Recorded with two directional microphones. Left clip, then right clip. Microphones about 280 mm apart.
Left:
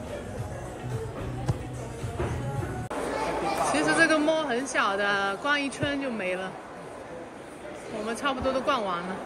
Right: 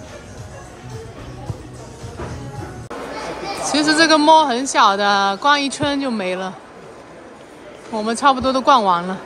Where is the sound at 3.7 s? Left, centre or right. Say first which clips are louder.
Right 10 dB; centre.